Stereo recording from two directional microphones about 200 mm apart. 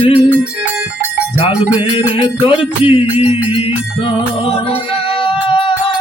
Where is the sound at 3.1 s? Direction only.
10° right (ahead or behind).